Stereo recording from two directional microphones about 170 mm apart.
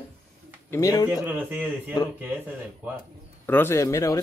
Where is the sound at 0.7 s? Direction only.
20° left (ahead or behind).